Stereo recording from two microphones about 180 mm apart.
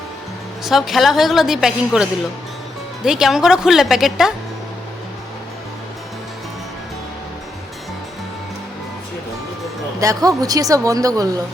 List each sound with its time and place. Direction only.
0.6 s a woman's voice: centre (ahead or behind)
10.0 s a woman's voice: 20° right (ahead or behind)